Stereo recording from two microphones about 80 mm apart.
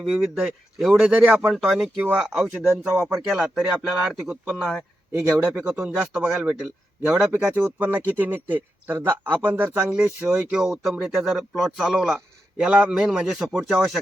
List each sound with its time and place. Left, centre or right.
0.0 s speech: centre
1.0 s speech: centre
1.5 s a man's voice: centre
4.8 s a man's voice: centre